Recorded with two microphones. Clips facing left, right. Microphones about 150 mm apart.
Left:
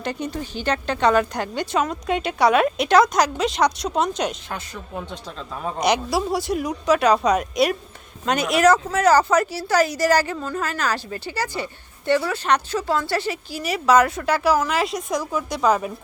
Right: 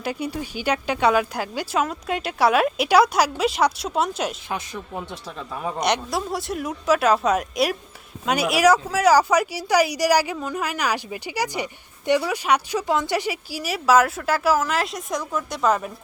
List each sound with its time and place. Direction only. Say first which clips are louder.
0.0 s speech: even; 10° right (ahead or behind)
5.6 s a woman's voice: left 2 dB; centre (ahead or behind)